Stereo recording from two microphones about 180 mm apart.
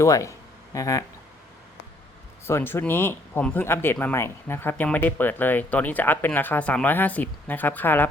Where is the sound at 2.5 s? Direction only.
15° left (ahead or behind).